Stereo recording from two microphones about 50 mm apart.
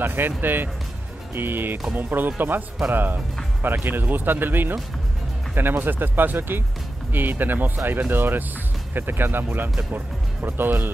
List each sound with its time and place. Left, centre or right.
0.0 s speech: right